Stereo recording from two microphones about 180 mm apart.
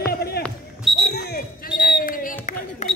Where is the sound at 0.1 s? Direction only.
60° left (ahead or behind).